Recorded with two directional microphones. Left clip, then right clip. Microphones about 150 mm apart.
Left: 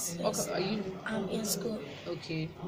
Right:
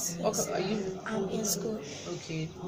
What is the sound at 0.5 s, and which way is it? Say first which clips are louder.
Speech: right 1 dB; 15° right (ahead or behind).